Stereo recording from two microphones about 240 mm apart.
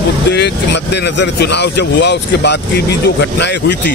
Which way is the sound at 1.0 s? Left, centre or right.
Left.